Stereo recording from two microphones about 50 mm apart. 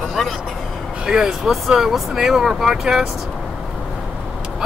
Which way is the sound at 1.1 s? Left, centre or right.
Centre.